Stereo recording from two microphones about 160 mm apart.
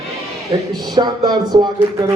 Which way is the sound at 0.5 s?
25° right (ahead or behind).